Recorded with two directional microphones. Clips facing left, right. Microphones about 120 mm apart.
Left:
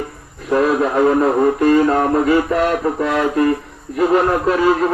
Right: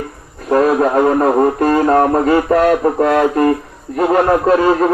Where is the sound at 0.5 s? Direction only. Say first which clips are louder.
Right 3 dB; 45° right (ahead or behind).